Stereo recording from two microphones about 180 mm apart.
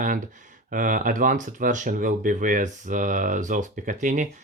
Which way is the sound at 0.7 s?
45° right (ahead or behind).